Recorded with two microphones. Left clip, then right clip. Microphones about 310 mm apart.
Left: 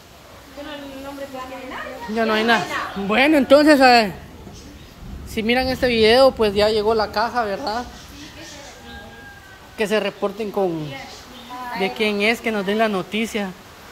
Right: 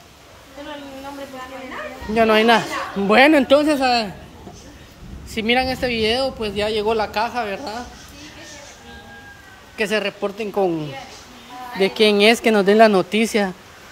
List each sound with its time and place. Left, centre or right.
2.1 s a child's voice: centre
5.3 s speech: centre
9.8 s speech: centre
11.8 s a woman's voice: centre